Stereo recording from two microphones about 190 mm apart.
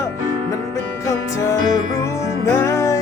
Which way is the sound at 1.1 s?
15° left (ahead or behind).